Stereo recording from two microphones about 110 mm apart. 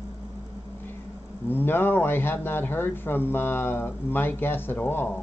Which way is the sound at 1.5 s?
20° left (ahead or behind).